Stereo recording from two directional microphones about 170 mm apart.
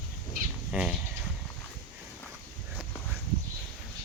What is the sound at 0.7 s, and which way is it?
Speech, 5° right (ahead or behind).